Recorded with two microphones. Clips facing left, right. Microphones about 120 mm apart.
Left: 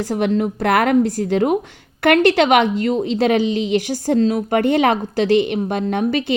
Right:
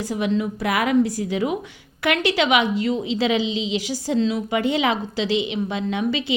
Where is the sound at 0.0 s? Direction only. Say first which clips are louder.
Left 4 dB; 60° left (ahead or behind).